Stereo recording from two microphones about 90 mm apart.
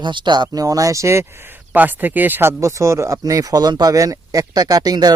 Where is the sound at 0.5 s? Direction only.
40° right (ahead or behind).